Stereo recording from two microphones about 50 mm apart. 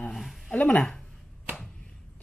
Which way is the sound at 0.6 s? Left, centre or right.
Left.